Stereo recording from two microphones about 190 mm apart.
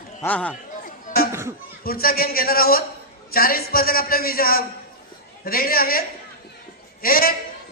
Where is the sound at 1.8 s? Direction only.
50° left (ahead or behind).